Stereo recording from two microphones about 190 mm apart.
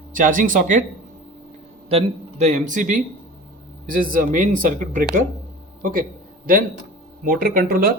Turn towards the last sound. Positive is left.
turn(degrees=-50)  # may be behind; listen again after turning